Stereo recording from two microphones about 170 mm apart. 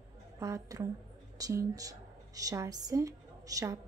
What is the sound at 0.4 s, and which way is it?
A woman's voice, 20° right (ahead or behind).